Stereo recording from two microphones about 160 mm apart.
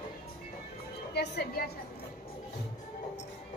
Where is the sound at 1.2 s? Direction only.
90° left.